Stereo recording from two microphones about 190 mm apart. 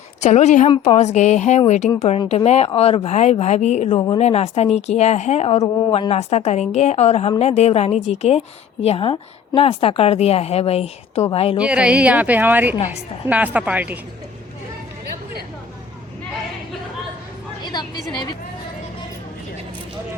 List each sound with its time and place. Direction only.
0.2 s speech: 35° left (ahead or behind)
3.9 s a woman's voice: 25° left (ahead or behind)
11.6 s a woman's voice: 5° right (ahead or behind)
17.6 s a sound: 20° left (ahead or behind)